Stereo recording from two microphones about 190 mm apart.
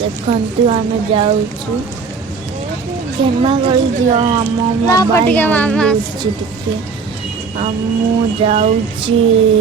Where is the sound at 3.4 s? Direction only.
25° right (ahead or behind).